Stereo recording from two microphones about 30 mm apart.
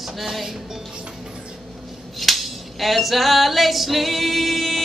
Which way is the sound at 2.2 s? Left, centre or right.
Centre.